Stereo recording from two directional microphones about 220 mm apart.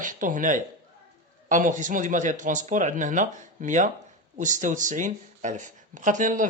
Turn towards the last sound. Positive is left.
turn(degrees=-35)  # may be behind; listen again after turning